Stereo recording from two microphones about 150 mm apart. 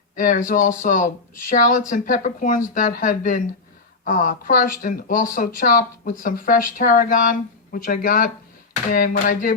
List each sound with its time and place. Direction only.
0.2 s a woman's voice: 65° left (ahead or behind)